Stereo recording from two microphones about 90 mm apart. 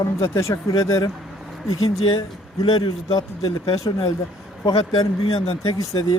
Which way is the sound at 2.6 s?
60° left (ahead or behind).